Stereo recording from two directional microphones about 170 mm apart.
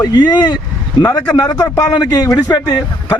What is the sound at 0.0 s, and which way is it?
A man's voice, 25° left (ahead or behind).